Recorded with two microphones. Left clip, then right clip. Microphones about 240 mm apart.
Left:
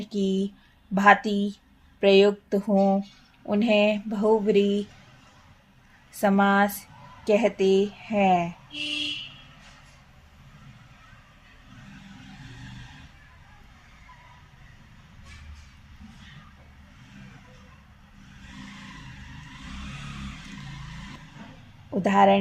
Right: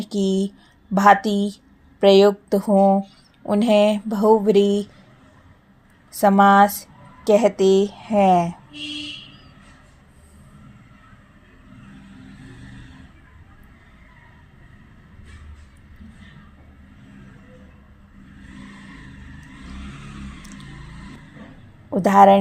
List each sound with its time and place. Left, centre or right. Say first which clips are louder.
0.0 s speech: right 5 dB; right
6.1 s speech: right 8 dB; right
21.8 s speech: right 7 dB; right